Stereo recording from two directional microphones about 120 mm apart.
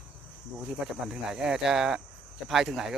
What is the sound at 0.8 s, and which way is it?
Speech, 5° right (ahead or behind).